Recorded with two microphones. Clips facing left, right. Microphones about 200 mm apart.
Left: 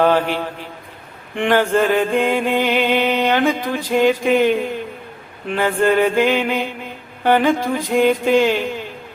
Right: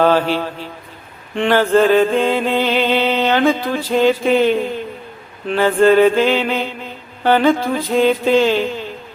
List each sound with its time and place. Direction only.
0.0 s a man's voice: 15° left (ahead or behind)
1.4 s music: 15° left (ahead or behind)